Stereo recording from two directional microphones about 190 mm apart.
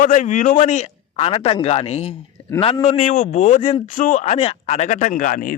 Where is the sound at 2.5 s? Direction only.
10° left (ahead or behind).